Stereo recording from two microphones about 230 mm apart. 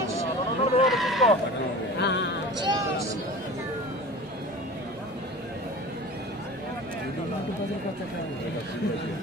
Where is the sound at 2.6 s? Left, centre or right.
Centre.